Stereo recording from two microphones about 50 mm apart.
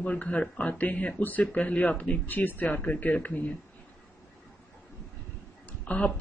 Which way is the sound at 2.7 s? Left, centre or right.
Left.